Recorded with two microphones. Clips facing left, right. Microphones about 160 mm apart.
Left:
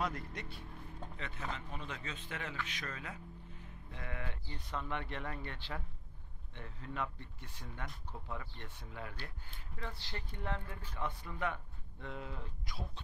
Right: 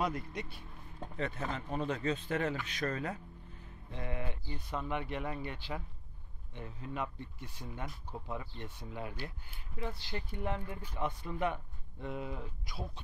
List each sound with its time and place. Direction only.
0.0 s speech: 15° right (ahead or behind)
1.1 s speech: 40° right (ahead or behind)
3.9 s speech: 25° right (ahead or behind)